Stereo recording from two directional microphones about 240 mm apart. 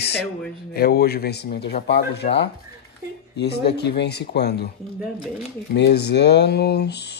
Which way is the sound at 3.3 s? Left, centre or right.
Left.